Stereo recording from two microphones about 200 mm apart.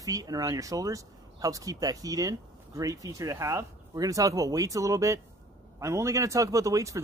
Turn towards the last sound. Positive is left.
turn(degrees=-15)  # may be behind; listen again after turning